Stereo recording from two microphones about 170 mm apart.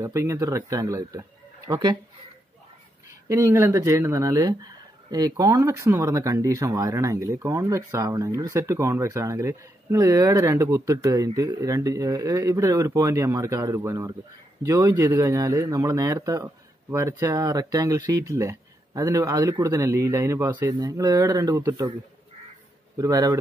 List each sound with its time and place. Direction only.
0.0 s speech: 20° right (ahead or behind)
3.1 s speech: 15° right (ahead or behind)
22.9 s speech: 20° right (ahead or behind)